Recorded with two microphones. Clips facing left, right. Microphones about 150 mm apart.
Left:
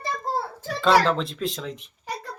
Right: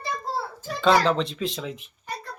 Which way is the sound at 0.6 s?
Centre (ahead or behind).